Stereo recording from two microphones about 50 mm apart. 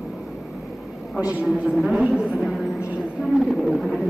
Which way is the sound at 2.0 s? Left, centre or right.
Right.